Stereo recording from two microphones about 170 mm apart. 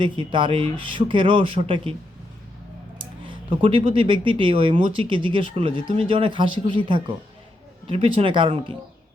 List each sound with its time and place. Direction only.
0.0 s speech: 30° right (ahead or behind)
3.0 s speech: 30° right (ahead or behind)